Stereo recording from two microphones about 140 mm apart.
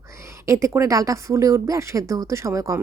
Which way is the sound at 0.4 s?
20° right (ahead or behind).